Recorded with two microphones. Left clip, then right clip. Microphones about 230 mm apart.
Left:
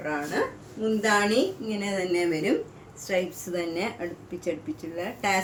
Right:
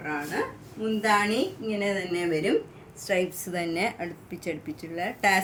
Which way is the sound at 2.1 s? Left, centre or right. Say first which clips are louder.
Left 4 dB; right.